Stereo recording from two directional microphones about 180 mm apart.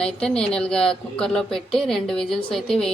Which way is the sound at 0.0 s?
5° left (ahead or behind).